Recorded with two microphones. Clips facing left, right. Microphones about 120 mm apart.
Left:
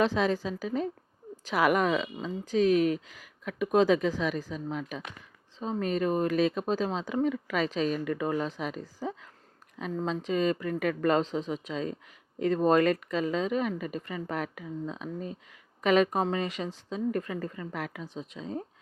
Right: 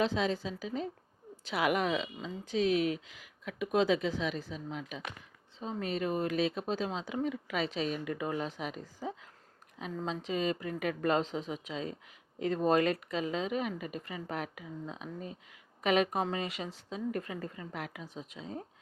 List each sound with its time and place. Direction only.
0.0 s speech: 50° left (ahead or behind)
9.7 s speech: 50° left (ahead or behind)